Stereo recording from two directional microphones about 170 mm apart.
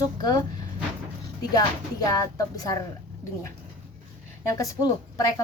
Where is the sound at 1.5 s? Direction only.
20° left (ahead or behind).